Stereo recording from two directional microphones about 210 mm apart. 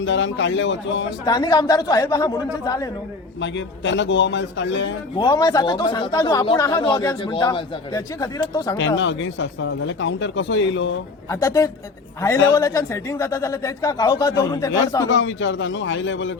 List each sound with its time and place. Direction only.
0.0 s speech: 60° left (ahead or behind)
1.2 s speech: 20° left (ahead or behind)
3.4 s speech: 60° left (ahead or behind)
5.1 s speech: 20° left (ahead or behind)
9.0 s speech: 60° left (ahead or behind)
11.3 s speech: 15° left (ahead or behind)
15.1 s speech: 65° left (ahead or behind)